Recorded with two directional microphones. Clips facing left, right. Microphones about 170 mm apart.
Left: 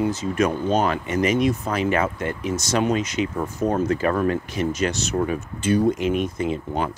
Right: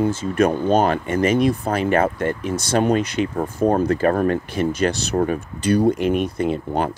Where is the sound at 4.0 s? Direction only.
45° right (ahead or behind).